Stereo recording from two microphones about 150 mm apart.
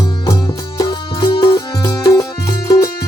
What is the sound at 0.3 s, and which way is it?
Music, 25° left (ahead or behind).